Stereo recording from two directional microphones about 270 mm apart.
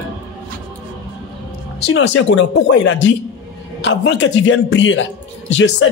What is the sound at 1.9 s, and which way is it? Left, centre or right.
Speech, left.